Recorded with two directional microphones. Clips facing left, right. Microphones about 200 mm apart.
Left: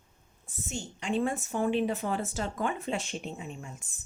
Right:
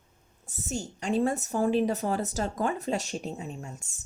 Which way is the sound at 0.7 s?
40° right (ahead or behind).